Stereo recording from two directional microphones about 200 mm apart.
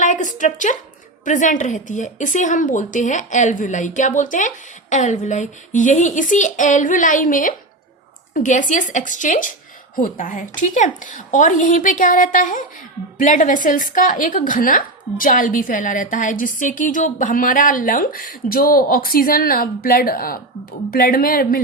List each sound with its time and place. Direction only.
0.0 s a woman's voice: 40° left (ahead or behind)